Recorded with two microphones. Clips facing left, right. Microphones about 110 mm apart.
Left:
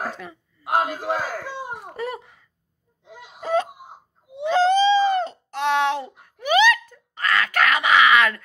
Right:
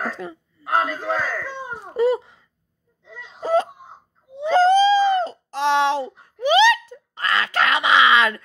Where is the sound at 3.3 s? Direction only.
30° right (ahead or behind).